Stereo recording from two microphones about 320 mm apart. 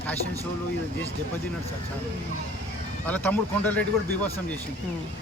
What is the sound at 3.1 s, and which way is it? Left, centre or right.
Speech, centre.